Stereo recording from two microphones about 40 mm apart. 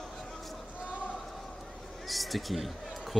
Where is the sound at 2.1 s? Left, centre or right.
Centre.